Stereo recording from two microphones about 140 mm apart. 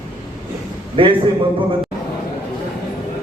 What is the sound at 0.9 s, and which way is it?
Speech, 40° right (ahead or behind).